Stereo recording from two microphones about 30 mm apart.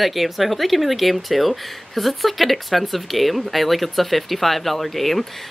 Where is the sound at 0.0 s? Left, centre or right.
Centre.